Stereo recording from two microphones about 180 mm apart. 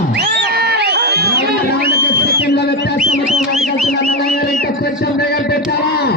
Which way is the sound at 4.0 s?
55° left (ahead or behind).